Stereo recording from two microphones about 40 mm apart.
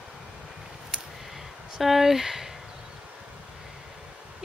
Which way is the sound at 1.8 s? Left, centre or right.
Centre.